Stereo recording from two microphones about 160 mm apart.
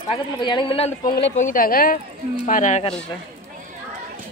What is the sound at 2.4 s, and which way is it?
Speech, 50° left (ahead or behind).